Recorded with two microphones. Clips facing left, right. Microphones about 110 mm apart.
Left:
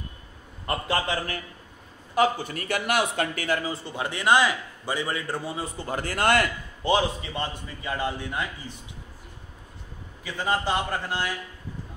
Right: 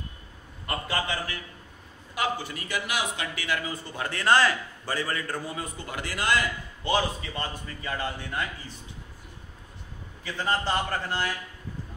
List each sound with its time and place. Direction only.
0.7 s a man's voice: 30° left (ahead or behind)
2.1 s a man's voice: 50° left (ahead or behind)
6.1 s a man's voice: 60° left (ahead or behind)
6.8 s a man's voice: 20° left (ahead or behind)
10.2 s a man's voice: 10° left (ahead or behind)